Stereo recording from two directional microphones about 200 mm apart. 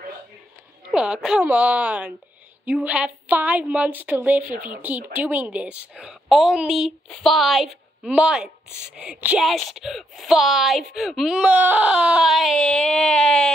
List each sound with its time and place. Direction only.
0.9 s a woman's voice: 5° right (ahead or behind)